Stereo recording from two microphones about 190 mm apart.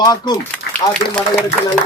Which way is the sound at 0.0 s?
20° left (ahead or behind).